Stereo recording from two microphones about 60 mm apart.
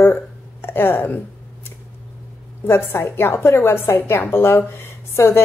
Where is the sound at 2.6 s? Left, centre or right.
Left.